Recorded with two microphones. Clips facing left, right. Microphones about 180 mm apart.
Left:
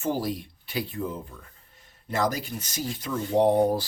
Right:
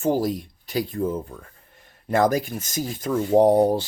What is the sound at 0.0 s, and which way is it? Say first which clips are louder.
Speech: right 6 dB; 45° right (ahead or behind).